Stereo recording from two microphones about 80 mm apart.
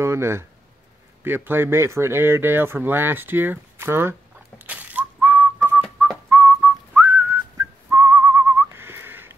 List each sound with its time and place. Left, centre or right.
0.0 s speech: right
4.6 s whistling: right